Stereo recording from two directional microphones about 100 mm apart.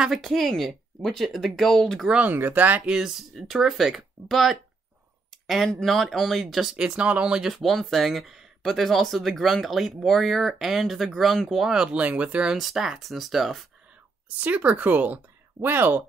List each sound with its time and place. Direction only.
0.0 s speech: centre (ahead or behind)
2.0 s speech: 15° right (ahead or behind)
14.4 s speech: 15° right (ahead or behind)